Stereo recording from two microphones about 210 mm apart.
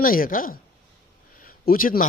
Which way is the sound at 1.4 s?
40° left (ahead or behind).